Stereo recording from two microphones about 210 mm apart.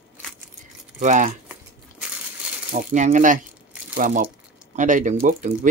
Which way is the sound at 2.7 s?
35° right (ahead or behind).